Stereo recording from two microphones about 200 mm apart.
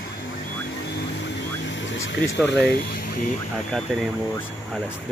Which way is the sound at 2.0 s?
60° left (ahead or behind).